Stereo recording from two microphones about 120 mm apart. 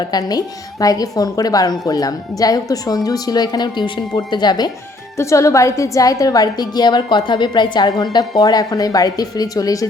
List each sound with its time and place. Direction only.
0.1 s a woman's voice: 35° left (ahead or behind)
5.1 s a woman's voice: 25° left (ahead or behind)